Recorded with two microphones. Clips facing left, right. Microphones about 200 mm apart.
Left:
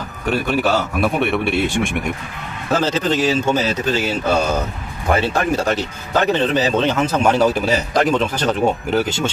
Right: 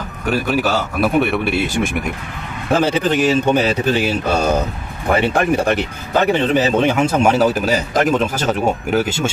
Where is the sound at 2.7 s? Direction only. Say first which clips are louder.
Right 2 dB; 15° right (ahead or behind).